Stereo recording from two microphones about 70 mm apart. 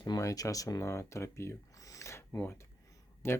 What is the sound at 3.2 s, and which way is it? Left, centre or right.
Speech, left.